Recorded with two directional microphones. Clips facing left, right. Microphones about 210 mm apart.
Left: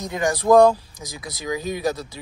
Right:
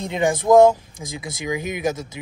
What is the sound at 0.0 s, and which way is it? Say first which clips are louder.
Speech: right 2 dB; 20° right (ahead or behind).